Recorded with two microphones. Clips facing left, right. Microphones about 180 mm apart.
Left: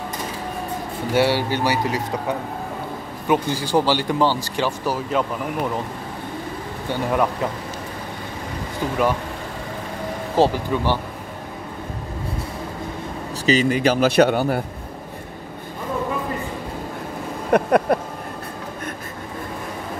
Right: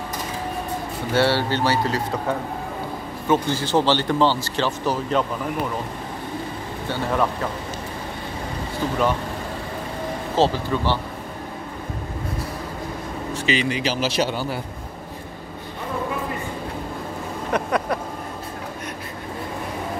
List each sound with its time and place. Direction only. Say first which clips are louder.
1.1 s a man's voice: left 1 dB; 15° left (ahead or behind)
3.3 s a man's voice: even; 10° left (ahead or behind)
6.9 s a man's voice: left 2 dB; 10° left (ahead or behind)
10.3 s a man's voice: left 2 dB; 15° left (ahead or behind)
13.3 s speech: left 5 dB; 40° left (ahead or behind); by 14.6 s 55° left (ahead or behind)
17.5 s speech: left 7 dB; 55° left (ahead or behind)